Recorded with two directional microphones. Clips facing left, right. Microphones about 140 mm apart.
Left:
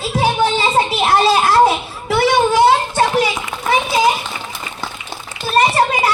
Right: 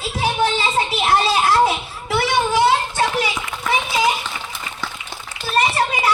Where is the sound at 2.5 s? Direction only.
40° left (ahead or behind).